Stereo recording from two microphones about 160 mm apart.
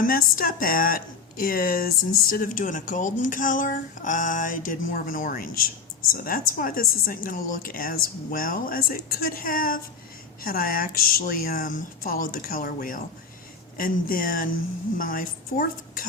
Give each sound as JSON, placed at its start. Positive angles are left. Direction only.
{"t": 0.0, "sound": "speech", "side_deg": 60}